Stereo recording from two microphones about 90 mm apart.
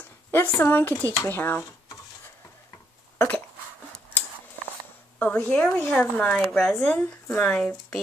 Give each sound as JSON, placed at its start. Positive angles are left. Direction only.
{"t": 0.3, "sound": "speech", "side_deg": 25}
{"t": 3.2, "sound": "cough", "side_deg": 20}
{"t": 5.2, "sound": "a woman's voice", "side_deg": 15}
{"t": 6.8, "sound": "a woman's voice", "side_deg": 20}